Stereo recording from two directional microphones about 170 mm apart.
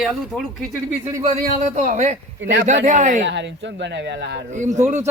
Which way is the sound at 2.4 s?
90° right.